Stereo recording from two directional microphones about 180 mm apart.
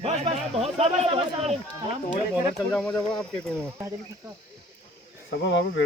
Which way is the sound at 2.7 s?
5° left (ahead or behind).